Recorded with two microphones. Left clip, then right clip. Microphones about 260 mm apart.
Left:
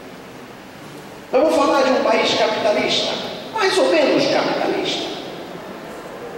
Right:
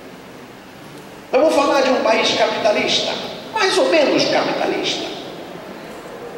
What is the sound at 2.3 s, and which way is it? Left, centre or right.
Speech, centre.